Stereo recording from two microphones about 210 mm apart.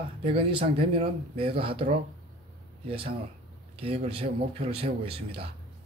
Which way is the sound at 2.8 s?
25° right (ahead or behind).